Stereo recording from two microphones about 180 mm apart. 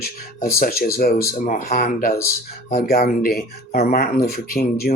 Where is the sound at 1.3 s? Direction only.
50° left (ahead or behind).